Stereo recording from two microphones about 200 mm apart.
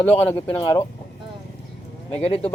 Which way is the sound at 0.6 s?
20° left (ahead or behind).